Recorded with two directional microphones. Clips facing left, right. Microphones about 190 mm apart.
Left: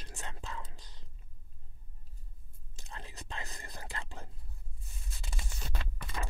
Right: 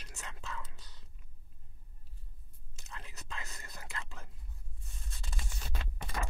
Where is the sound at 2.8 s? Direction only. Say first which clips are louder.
Left 3 dB; 30° left (ahead or behind).